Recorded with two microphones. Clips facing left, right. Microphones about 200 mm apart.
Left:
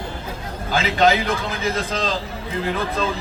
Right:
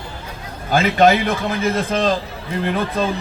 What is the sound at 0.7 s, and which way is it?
A man's voice, 55° right (ahead or behind).